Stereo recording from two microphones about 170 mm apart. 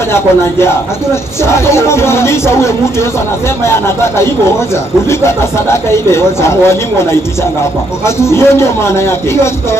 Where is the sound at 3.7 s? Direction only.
15° left (ahead or behind).